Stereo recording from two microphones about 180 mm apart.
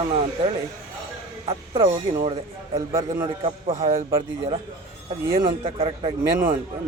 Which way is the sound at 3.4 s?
35° right (ahead or behind).